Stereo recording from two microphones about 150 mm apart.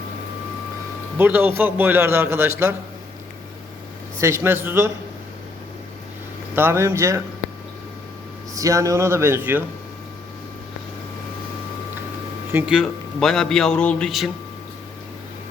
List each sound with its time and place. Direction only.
1.2 s a man's voice: 15° right (ahead or behind)
4.2 s a man's voice: 15° right (ahead or behind)
6.6 s a man's voice: 15° right (ahead or behind)
8.5 s a man's voice: 20° right (ahead or behind)
12.5 s speech: 15° right (ahead or behind)
12.7 s a man's voice: centre (ahead or behind)